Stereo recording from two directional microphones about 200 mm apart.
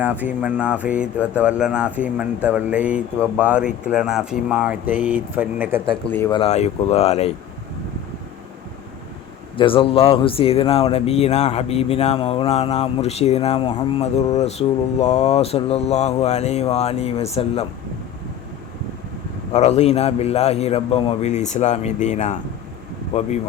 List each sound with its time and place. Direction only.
0.0 s a sound: 10° right (ahead or behind)
6.1 s speech: 10° left (ahead or behind)
6.3 s a man's voice: 30° left (ahead or behind)
9.6 s a man's voice: 25° left (ahead or behind)
19.5 s a man's voice: 35° left (ahead or behind)